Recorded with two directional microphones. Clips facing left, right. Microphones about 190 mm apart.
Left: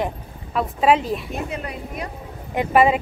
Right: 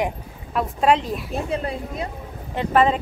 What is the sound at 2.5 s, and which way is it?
Speech, 10° left (ahead or behind).